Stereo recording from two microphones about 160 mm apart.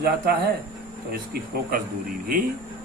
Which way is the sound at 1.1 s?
75° right (ahead or behind).